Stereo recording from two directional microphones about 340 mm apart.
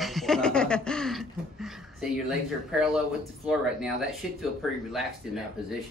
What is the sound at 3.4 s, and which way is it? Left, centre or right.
Speech, centre.